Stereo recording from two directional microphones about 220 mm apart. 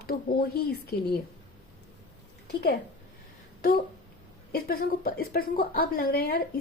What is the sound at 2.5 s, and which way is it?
Speech, 50° left (ahead or behind).